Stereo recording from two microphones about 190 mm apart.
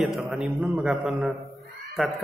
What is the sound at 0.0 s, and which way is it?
A man's voice, centre (ahead or behind).